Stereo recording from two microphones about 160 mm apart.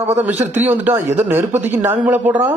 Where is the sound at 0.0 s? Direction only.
10° right (ahead or behind).